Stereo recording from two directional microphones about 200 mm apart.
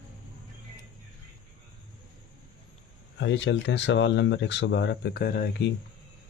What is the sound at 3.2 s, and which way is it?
Speech, 65° left (ahead or behind).